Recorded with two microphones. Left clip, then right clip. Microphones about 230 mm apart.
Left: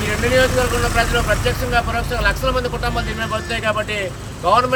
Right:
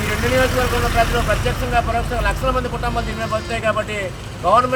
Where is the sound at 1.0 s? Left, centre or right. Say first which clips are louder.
Even; centre.